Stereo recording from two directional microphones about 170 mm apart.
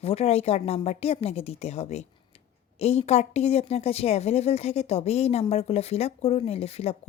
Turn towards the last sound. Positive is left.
turn(degrees=35)  # may be behind; listen again after turning